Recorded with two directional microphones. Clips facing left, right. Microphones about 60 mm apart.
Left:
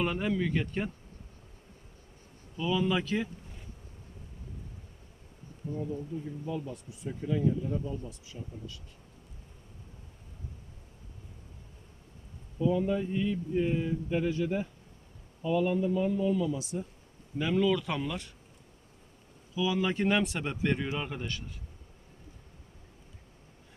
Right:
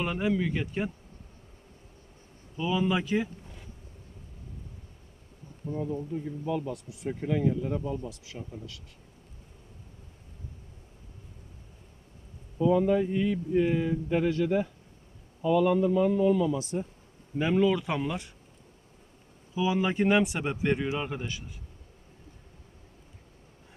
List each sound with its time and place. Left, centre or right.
0.0 s speech: centre
2.6 s speech: centre
5.7 s speech: right
12.6 s speech: right
15.4 s speech: right
17.3 s speech: right
19.5 s speech: right